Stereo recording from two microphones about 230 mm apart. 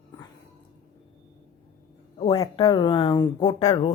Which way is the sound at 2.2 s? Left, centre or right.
Left.